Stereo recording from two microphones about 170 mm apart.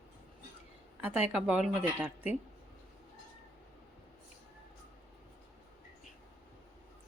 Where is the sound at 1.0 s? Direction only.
10° right (ahead or behind).